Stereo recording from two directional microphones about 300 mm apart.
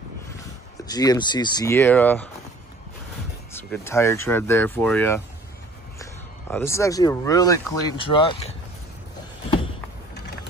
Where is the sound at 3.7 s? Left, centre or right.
Centre.